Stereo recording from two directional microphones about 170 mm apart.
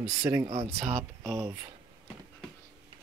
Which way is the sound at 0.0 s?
10° right (ahead or behind).